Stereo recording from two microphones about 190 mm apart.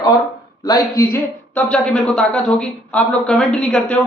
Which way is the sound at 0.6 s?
15° left (ahead or behind).